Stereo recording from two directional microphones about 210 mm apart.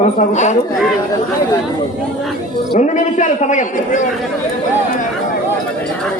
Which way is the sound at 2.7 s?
35° left (ahead or behind).